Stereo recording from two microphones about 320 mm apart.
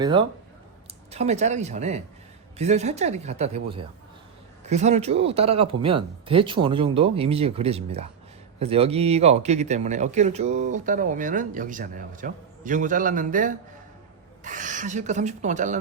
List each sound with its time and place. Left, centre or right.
0.0 s speech: centre